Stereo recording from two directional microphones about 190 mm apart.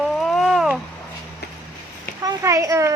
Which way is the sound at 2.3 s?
15° right (ahead or behind).